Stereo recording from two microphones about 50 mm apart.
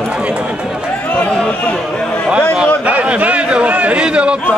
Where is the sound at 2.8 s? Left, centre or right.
Right.